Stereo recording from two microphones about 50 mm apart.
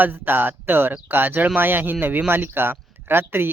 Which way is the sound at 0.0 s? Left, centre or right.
Right.